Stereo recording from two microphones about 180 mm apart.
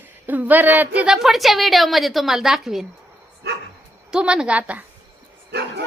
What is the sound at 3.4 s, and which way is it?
Dog, 70° right (ahead or behind).